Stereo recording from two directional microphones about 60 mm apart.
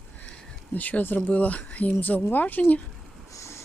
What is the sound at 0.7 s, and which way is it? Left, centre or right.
Speech, left.